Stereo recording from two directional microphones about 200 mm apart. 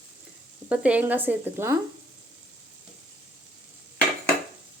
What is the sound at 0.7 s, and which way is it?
Speech, 5° right (ahead or behind).